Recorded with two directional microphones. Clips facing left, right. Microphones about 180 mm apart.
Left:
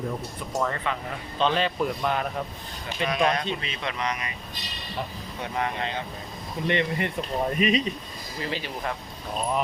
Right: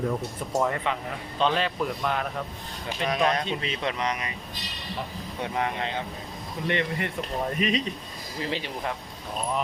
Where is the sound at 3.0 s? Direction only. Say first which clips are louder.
Left 1 dB; 35° right (ahead or behind).